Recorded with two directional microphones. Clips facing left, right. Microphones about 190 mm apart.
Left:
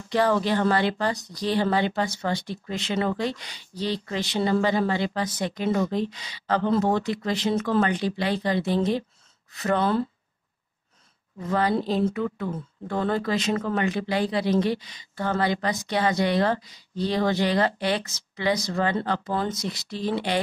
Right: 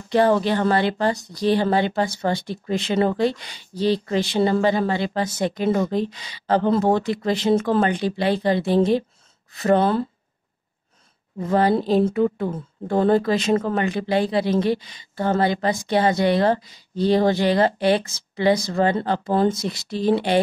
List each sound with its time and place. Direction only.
0.1 s speech: 25° right (ahead or behind)
11.3 s speech: 30° right (ahead or behind)